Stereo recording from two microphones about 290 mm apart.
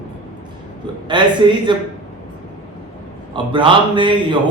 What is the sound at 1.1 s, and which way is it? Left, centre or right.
Speech, centre.